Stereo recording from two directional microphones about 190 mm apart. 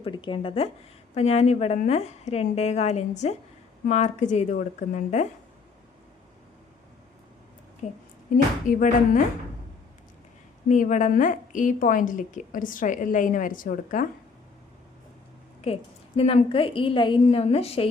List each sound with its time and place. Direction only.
0.0 s a woman's voice: 25° left (ahead or behind)
7.8 s a woman's voice: 35° left (ahead or behind)
10.7 s a woman's voice: 40° left (ahead or behind)
15.6 s a woman's voice: 30° left (ahead or behind)